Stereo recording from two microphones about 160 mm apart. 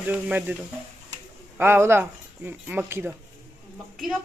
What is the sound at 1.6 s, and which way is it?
Speech, 15° right (ahead or behind).